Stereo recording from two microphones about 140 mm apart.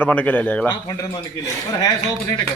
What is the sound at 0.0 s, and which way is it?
Speech, 10° left (ahead or behind).